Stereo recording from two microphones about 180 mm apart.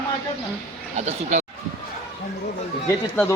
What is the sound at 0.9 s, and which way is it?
Speech, 40° right (ahead or behind).